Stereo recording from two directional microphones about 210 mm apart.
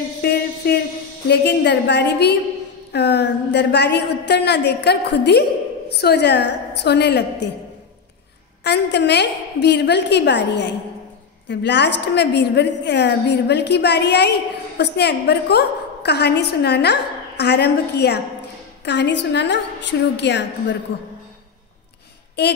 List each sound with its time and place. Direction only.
0.2 s a sound: 50° left (ahead or behind)
1.2 s a woman's voice: 55° left (ahead or behind)
8.6 s a woman's voice: 55° left (ahead or behind)